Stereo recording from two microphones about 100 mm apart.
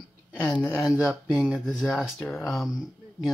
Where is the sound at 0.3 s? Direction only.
15° left (ahead or behind).